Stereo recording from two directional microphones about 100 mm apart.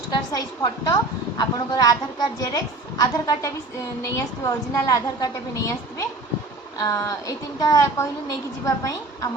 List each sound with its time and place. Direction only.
0.1 s a woman's voice: 45° left (ahead or behind)
3.0 s a woman's voice: 40° left (ahead or behind)